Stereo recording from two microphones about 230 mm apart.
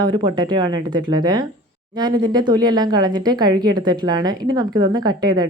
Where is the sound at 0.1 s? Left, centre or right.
Right.